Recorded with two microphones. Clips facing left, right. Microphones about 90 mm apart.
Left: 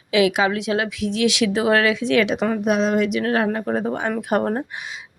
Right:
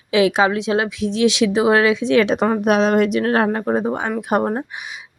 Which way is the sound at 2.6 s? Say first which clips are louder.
Right 4 dB; 60° right (ahead or behind).